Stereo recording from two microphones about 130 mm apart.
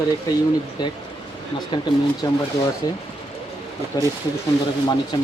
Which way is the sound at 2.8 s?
30° left (ahead or behind).